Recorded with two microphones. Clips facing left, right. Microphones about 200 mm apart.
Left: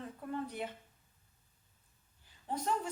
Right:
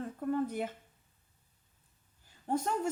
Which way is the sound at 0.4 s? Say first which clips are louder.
Right 5 dB; 45° right (ahead or behind).